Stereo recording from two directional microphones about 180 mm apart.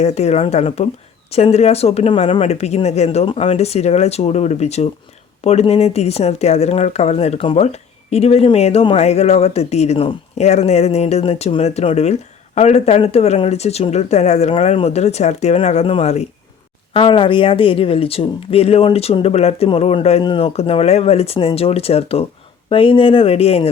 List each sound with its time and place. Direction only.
0.0 s speech: 35° left (ahead or behind)